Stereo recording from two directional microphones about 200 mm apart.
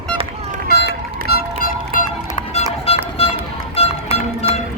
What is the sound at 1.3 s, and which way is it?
Music, 50° left (ahead or behind).